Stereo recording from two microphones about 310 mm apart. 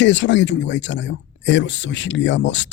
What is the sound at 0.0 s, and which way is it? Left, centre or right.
Speech, left.